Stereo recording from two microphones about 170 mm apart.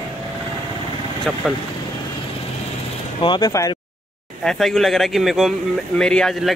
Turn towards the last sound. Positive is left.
turn(degrees=0)  # may be behind; listen again after turning